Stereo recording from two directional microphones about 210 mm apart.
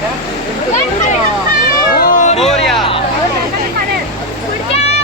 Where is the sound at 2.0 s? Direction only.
35° left (ahead or behind).